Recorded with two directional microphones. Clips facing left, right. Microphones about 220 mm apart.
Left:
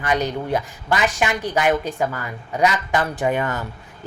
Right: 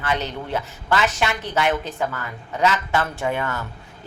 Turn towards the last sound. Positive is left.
turn(degrees=15)  # may be behind; listen again after turning